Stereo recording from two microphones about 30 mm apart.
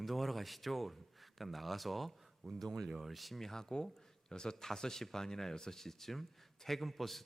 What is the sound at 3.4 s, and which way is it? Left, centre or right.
Speech, centre.